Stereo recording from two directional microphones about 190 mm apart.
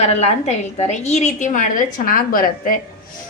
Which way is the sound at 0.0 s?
35° left (ahead or behind).